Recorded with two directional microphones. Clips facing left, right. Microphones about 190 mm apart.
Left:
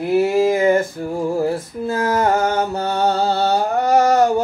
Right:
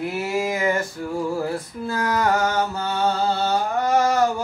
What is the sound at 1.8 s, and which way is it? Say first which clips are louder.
Mantra: left 4 dB; 25° left (ahead or behind).